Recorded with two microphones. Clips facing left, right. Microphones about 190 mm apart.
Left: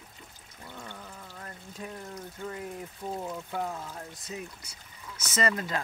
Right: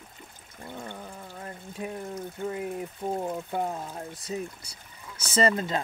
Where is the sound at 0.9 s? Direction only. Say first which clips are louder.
Right 4 dB; 30° right (ahead or behind).